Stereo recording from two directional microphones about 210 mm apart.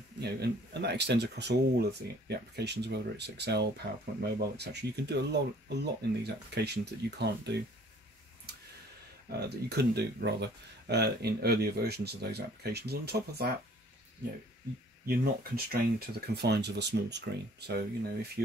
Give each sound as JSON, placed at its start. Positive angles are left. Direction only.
{"t": 0.2, "sound": "speech", "side_deg": -50}
{"t": 9.5, "sound": "speech", "side_deg": -50}
{"t": 15.0, "sound": "speech", "side_deg": -45}